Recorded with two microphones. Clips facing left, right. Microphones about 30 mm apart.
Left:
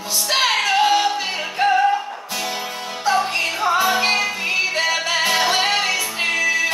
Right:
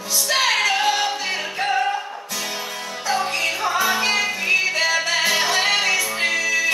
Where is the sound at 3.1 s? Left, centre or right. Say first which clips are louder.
Left 2 dB; left.